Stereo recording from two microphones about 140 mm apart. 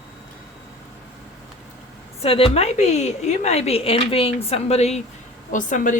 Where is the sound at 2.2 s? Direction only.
45° left (ahead or behind).